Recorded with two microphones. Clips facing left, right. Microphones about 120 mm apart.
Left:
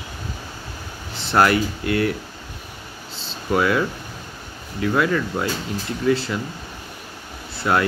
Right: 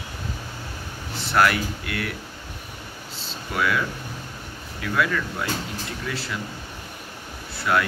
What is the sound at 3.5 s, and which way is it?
Speech, 30° left (ahead or behind).